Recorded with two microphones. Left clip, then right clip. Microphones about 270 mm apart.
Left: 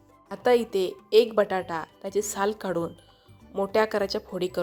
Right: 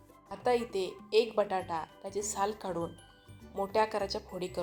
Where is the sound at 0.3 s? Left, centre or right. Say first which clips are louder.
Left 8 dB; left.